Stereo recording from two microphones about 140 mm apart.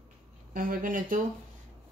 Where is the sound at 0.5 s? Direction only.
85° right.